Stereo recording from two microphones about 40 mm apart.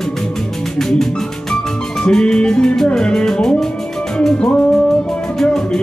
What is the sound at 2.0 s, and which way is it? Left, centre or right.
Music, left.